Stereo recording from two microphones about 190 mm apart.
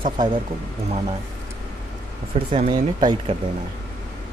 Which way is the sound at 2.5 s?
30° right (ahead or behind).